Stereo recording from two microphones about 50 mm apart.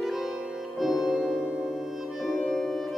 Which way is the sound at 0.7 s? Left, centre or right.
Centre.